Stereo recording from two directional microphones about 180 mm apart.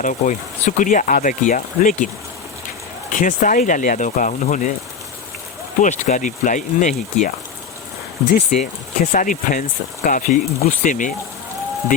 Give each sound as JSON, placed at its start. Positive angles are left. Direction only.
{"t": 0.0, "sound": "speech", "side_deg": 45}
{"t": 3.1, "sound": "speech", "side_deg": 45}
{"t": 5.8, "sound": "speech", "side_deg": 40}
{"t": 8.3, "sound": "speech", "side_deg": 45}